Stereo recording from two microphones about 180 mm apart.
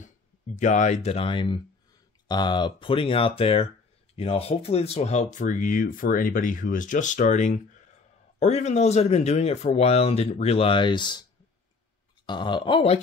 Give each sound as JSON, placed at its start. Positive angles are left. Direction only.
{"t": 0.6, "sound": "speech", "side_deg": 40}
{"t": 12.3, "sound": "speech", "side_deg": 25}